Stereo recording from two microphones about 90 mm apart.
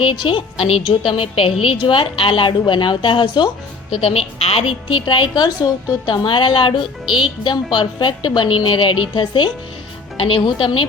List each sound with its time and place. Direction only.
0.1 s a woman's voice: 65° left (ahead or behind); by 1.5 s 90° left
1.6 s a woman's voice: 75° left (ahead or behind); by 3.5 s 60° left (ahead or behind)
4.0 s a woman's voice: 90° left; by 9.5 s 65° left (ahead or behind)
10.2 s a woman's voice: 90° left
10.4 s a woman's voice: 60° left (ahead or behind)